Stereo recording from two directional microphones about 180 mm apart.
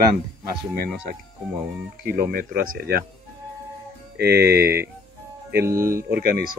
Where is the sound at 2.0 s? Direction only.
60° right (ahead or behind).